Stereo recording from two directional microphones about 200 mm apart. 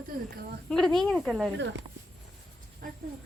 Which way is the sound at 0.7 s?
5° left (ahead or behind).